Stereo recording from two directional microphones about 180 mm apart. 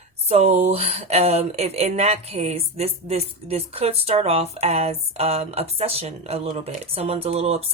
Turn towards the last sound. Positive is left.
turn(degrees=-35)  # may be behind; listen again after turning